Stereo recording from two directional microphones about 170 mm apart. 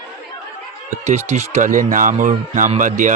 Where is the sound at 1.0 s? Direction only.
40° right (ahead or behind).